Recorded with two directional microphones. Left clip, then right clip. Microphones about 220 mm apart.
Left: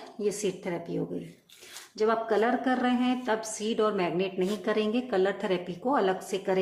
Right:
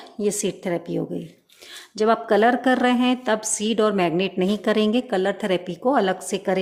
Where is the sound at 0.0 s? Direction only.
40° right (ahead or behind).